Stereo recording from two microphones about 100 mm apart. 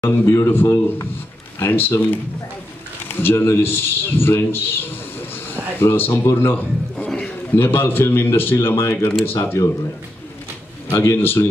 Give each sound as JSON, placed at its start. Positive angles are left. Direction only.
{"t": 0.0, "sound": "a man's voice", "side_deg": 25}
{"t": 7.1, "sound": "speech", "side_deg": 5}
{"t": 7.5, "sound": "a man's voice", "side_deg": 25}
{"t": 11.0, "sound": "a man's voice", "side_deg": 25}